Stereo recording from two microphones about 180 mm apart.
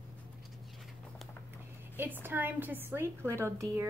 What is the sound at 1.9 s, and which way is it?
A woman's voice, 10° right (ahead or behind).